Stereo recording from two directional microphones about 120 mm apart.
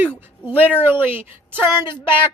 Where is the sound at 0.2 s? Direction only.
15° right (ahead or behind).